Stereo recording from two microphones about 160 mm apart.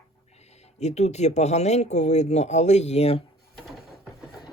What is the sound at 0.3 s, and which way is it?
Speech, 45° left (ahead or behind).